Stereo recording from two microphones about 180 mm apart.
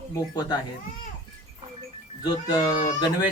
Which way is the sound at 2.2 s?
20° left (ahead or behind).